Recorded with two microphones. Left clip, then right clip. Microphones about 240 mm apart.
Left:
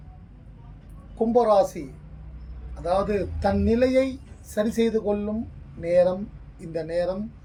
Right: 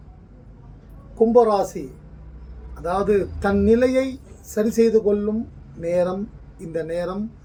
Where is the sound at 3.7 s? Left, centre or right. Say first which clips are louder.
Right 3 dB; centre.